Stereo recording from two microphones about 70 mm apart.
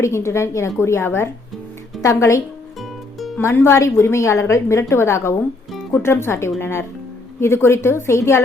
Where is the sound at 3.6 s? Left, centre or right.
Left.